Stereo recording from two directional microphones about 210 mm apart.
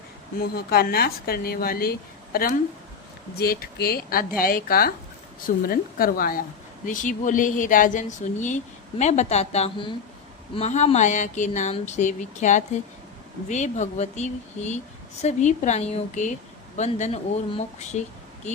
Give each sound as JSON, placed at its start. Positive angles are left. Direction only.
{"t": 0.3, "sound": "speech", "side_deg": 45}